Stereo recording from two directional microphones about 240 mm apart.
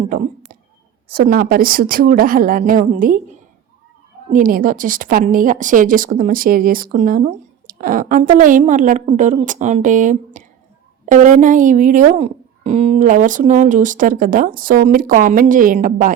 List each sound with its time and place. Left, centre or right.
1.0 s a woman's voice: right